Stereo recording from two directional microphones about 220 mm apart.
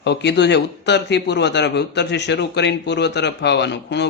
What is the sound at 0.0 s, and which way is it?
A man's voice, 50° left (ahead or behind).